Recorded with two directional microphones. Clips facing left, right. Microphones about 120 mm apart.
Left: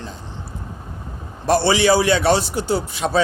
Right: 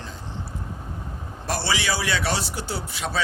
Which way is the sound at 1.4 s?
25° left (ahead or behind).